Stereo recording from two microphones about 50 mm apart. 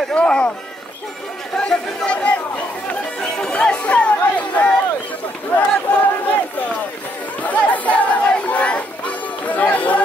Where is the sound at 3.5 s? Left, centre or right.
Left.